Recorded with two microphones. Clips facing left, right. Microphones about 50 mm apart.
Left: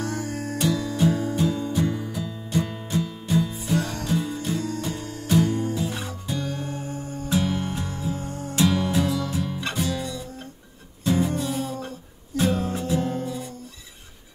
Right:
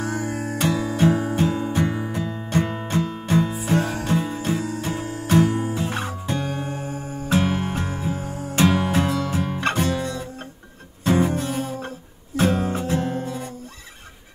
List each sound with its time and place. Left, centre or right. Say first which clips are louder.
0.0 s music: right 3 dB; centre
0.6 s music: right 2 dB; right
3.7 s music: right 3 dB; centre
4.0 s music: right 3 dB; right
4.6 s music: right 1 dB; centre
5.2 s music: right 3 dB; right
5.8 s music: right 3 dB; right
6.4 s music: right 3 dB; centre
7.2 s music: right 3 dB; right
8.1 s music: right 2 dB; centre
8.5 s music: right 3 dB; right
12.7 s music: right 1 dB; right